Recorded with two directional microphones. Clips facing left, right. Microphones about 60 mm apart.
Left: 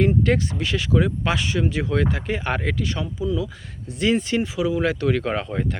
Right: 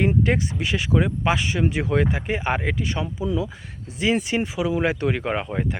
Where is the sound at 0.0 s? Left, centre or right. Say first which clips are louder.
Left 1 dB; centre.